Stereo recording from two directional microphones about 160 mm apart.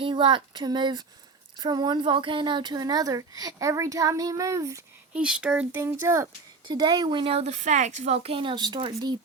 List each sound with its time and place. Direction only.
0.0 s speech: 30° right (ahead or behind)
5.1 s speech: 5° right (ahead or behind)
6.7 s speech: 25° right (ahead or behind)